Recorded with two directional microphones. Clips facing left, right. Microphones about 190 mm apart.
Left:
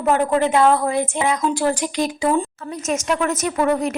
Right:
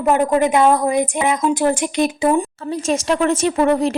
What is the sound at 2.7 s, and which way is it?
A woman's voice, 30° right (ahead or behind).